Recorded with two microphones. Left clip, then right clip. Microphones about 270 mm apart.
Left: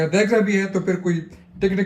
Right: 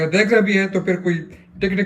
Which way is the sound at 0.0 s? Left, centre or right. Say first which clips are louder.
Right 2 dB; centre.